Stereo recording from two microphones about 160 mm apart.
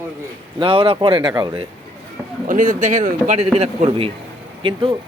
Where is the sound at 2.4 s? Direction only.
55° right (ahead or behind); by 5.0 s 30° right (ahead or behind).